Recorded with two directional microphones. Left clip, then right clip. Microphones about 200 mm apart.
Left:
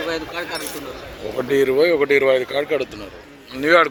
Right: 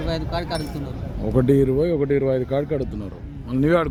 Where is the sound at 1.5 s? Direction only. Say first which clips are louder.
Left 9 dB; 5° right (ahead or behind).